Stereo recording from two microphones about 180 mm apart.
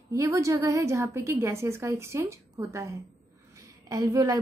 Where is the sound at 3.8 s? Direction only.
20° right (ahead or behind).